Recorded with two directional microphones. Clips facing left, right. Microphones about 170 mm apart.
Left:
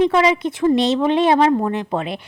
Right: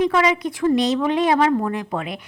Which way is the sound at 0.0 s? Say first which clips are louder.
Left 3 dB; 25° left (ahead or behind).